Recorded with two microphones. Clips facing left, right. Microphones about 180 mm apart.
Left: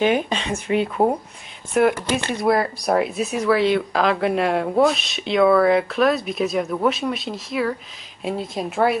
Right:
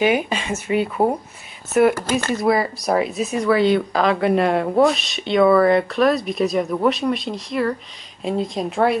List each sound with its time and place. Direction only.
0.0 s speech: 5° right (ahead or behind)
2.0 s speech: 45° right (ahead or behind)
2.3 s speech: centre (ahead or behind)